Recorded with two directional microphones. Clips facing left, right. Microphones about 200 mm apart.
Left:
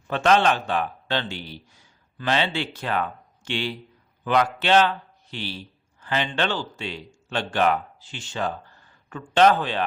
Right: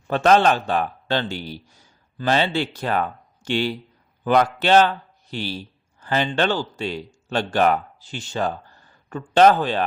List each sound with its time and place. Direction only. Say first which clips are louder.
0.1 s a man's voice: right 3 dB; 40° right (ahead or behind)